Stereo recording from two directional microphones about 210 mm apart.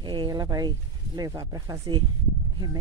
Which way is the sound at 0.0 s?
20° right (ahead or behind).